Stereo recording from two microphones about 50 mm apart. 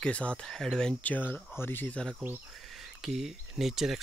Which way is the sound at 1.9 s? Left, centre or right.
Centre.